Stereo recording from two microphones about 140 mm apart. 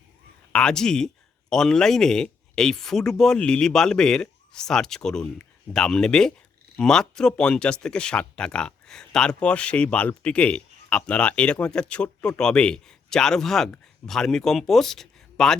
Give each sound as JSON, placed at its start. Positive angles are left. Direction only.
{"t": 0.5, "sound": "speech", "side_deg": 5}